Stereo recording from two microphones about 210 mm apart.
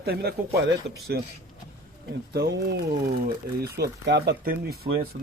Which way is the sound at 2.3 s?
50° right (ahead or behind).